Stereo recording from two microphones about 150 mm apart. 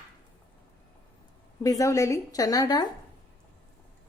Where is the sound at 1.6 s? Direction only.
20° left (ahead or behind).